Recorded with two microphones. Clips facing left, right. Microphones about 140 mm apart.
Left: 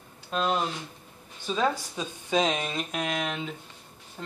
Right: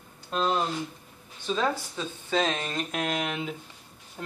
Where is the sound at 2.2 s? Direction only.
15° left (ahead or behind).